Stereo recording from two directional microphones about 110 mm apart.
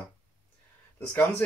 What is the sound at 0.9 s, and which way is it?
Speech, 15° left (ahead or behind).